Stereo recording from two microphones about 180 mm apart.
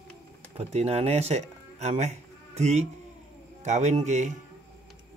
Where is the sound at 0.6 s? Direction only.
35° right (ahead or behind).